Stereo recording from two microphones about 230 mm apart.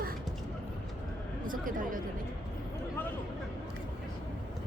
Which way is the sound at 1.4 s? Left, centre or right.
Right.